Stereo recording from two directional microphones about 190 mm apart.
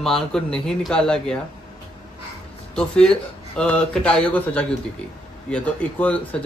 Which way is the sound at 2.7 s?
5° left (ahead or behind).